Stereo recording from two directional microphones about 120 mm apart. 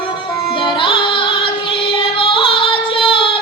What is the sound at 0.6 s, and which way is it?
Music, 45° left (ahead or behind).